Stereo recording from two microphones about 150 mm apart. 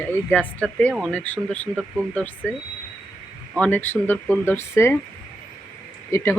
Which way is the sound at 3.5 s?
10° left (ahead or behind).